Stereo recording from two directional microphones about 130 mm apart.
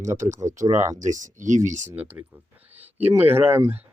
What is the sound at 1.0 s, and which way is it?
Speech, 75° right (ahead or behind).